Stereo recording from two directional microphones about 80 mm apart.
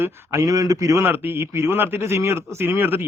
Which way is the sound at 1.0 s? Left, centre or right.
Right.